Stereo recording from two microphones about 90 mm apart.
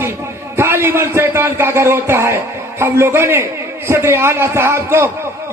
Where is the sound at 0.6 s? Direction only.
25° right (ahead or behind).